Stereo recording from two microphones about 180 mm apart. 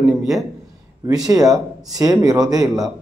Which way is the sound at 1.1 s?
20° right (ahead or behind).